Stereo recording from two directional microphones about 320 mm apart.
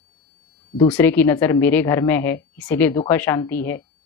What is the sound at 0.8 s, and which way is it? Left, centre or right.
A woman's voice, centre.